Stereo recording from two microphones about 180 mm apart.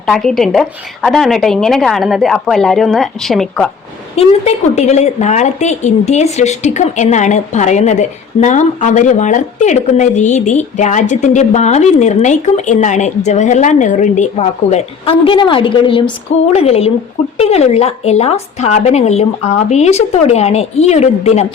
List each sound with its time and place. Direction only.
0.0 s a woman's voice: centre (ahead or behind)
4.1 s a woman's voice: 35° left (ahead or behind)